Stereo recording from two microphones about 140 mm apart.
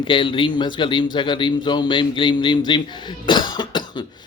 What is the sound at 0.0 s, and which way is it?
A man's voice, 35° left (ahead or behind).